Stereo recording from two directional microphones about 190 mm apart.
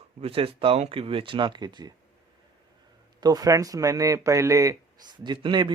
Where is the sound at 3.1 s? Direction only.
20° right (ahead or behind).